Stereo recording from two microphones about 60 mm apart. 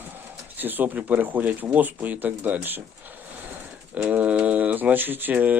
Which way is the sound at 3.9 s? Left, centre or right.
Right.